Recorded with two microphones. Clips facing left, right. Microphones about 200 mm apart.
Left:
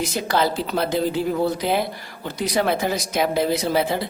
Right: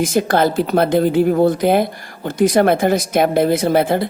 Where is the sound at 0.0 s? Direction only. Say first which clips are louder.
Right 6 dB; 50° right (ahead or behind).